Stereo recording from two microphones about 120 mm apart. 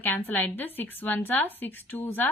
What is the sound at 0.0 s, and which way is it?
A woman's voice, 15° left (ahead or behind).